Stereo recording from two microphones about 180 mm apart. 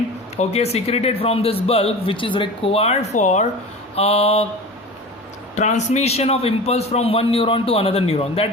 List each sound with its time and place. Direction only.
0.3 s a man's voice: 35° left (ahead or behind)
5.5 s a man's voice: 40° left (ahead or behind)